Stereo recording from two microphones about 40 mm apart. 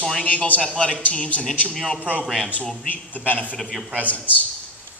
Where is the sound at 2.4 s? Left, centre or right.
Left.